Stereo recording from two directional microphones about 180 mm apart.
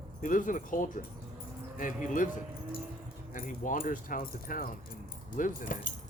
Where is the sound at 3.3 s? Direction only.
50° left (ahead or behind).